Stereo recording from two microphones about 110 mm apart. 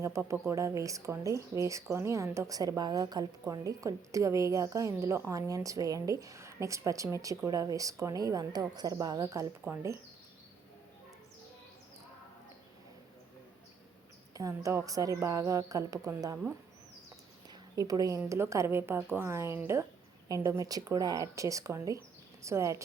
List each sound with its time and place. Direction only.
0.0 s speech: 25° right (ahead or behind)
14.3 s a woman's voice: 30° right (ahead or behind)
17.7 s a woman's voice: 35° right (ahead or behind)